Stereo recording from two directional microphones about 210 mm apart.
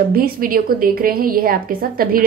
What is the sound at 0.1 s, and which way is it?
A woman's voice, 45° right (ahead or behind).